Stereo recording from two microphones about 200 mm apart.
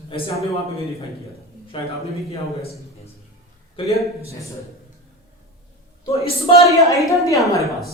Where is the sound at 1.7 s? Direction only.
25° left (ahead or behind).